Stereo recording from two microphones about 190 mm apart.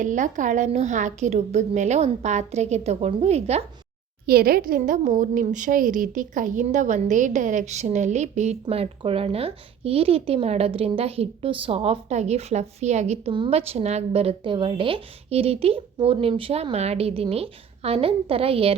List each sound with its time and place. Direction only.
0.0 s a woman's voice: 40° right (ahead or behind)
4.3 s a woman's voice: 55° right (ahead or behind); by 18.8 s 30° right (ahead or behind)